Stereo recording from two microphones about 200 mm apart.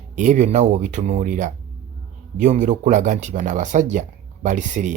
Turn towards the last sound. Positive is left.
turn(degrees=-40)  # may be behind; listen again after turning